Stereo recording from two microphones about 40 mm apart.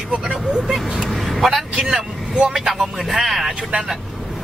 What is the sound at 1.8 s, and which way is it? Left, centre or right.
Speech, right.